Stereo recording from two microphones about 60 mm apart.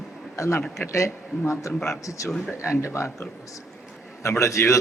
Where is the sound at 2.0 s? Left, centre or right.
Left.